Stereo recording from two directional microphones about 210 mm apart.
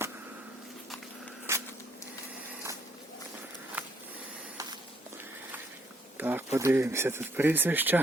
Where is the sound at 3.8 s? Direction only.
10° right (ahead or behind).